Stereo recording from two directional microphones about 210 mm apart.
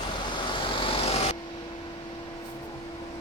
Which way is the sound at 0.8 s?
25° left (ahead or behind).